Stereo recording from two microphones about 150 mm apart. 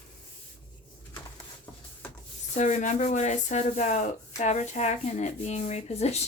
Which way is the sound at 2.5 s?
55° left (ahead or behind).